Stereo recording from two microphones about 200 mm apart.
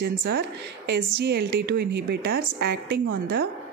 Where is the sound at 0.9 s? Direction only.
55° right (ahead or behind).